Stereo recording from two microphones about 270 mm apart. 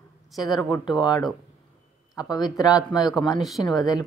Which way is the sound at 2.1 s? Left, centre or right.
Centre.